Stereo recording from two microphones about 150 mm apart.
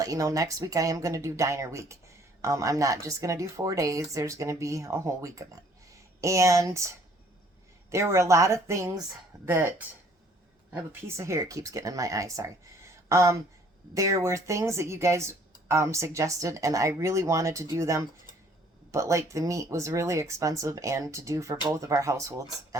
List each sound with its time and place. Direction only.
0.0 s speech: 20° right (ahead or behind)
11.2 s speech: 20° right (ahead or behind)